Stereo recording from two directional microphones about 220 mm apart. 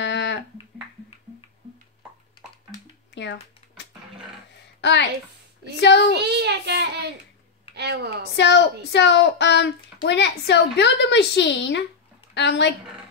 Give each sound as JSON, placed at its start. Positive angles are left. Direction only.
{"t": 0.0, "sound": "music", "side_deg": 55}
{"t": 3.2, "sound": "a sound", "side_deg": 50}
{"t": 4.8, "sound": "a woman's voice", "side_deg": 50}
{"t": 6.1, "sound": "a child's voice", "side_deg": -50}
{"t": 8.4, "sound": "a woman's voice", "side_deg": 50}